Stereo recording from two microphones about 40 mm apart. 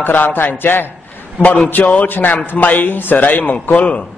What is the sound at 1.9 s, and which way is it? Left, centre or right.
A man's voice, left.